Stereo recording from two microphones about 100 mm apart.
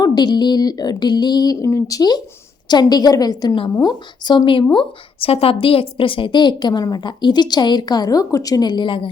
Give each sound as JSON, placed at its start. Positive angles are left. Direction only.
{"t": 0.0, "sound": "a woman's voice", "side_deg": 45}
{"t": 1.6, "sound": "a woman's voice", "side_deg": 35}
{"t": 4.7, "sound": "a woman's voice", "side_deg": 65}